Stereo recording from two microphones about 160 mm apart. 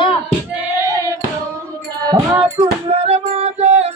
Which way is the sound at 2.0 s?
25° right (ahead or behind).